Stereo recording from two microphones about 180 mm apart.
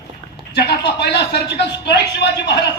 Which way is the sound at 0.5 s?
65° left (ahead or behind).